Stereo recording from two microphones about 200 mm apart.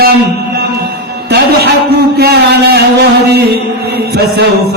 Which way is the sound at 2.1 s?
55° right (ahead or behind).